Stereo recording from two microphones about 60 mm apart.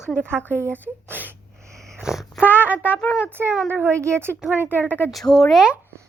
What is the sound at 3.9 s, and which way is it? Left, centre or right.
Speech, right.